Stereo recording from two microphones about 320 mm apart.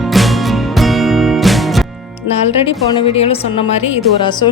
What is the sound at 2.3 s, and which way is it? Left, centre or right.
A woman's voice, centre.